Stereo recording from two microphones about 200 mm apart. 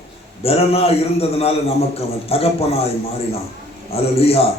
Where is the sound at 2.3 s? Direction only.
30° left (ahead or behind).